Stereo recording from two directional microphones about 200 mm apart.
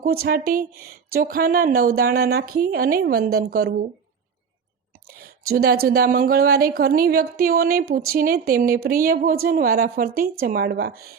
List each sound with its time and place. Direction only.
0.0 s speech: 50° right (ahead or behind)
5.5 s speech: 50° right (ahead or behind)